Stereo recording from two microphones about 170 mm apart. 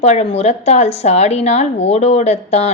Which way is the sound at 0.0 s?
40° left (ahead or behind).